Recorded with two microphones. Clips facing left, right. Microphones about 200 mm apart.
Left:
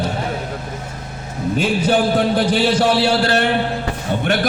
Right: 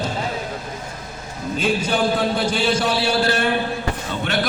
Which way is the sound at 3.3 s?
70° left (ahead or behind).